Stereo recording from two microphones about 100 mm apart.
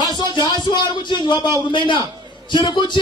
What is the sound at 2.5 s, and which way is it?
Speech, 50° left (ahead or behind).